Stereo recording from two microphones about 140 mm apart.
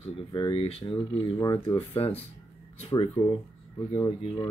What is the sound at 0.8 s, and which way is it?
Speech, 30° left (ahead or behind).